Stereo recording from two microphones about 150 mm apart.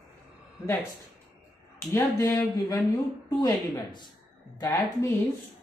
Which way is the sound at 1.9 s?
20° left (ahead or behind).